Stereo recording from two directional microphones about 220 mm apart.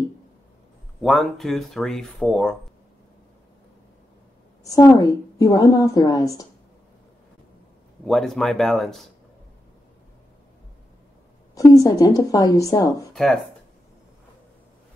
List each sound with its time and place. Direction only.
1.0 s speech: centre (ahead or behind)
4.6 s a woman's voice: 15° left (ahead or behind)
8.0 s speech: centre (ahead or behind)
11.5 s a woman's voice: 15° left (ahead or behind)
13.1 s speech: centre (ahead or behind)